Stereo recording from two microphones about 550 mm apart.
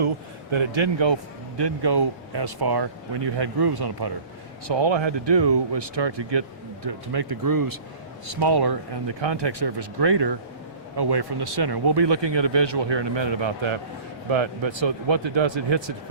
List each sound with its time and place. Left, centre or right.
0.5 s a man's voice: right